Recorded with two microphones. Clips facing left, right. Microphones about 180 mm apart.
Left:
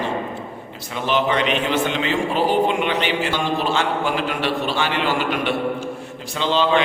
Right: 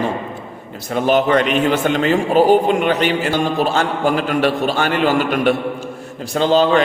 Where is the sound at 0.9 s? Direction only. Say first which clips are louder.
Right 6 dB; 45° right (ahead or behind).